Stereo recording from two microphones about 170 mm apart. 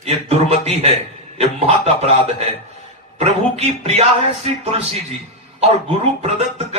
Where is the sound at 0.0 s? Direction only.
35° right (ahead or behind).